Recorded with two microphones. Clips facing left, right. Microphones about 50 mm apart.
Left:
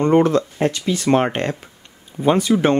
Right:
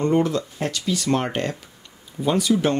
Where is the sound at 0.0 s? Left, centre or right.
Left.